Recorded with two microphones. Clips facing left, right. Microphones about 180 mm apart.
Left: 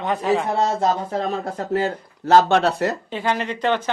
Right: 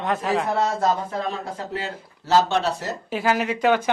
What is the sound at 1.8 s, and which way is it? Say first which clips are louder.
Speech: left 8 dB; 50° left (ahead or behind).